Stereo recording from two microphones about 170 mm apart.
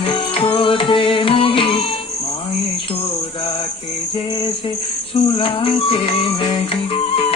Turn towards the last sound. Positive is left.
turn(degrees=35)  # may be behind; listen again after turning